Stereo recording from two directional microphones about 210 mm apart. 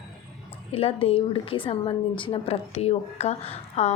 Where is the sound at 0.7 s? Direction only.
25° left (ahead or behind).